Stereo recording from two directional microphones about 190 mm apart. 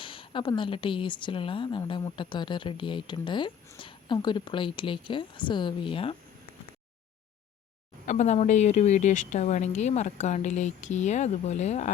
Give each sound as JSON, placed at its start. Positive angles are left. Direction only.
{"t": 0.0, "sound": "speech", "side_deg": 25}
{"t": 8.0, "sound": "speech", "side_deg": 40}